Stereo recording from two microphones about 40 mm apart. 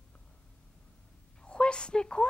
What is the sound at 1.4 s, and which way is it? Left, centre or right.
Speech, left.